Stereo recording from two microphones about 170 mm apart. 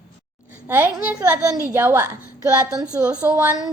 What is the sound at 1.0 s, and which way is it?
A woman's voice, 15° right (ahead or behind).